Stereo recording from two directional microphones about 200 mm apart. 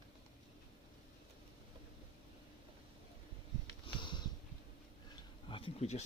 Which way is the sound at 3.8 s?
25° left (ahead or behind).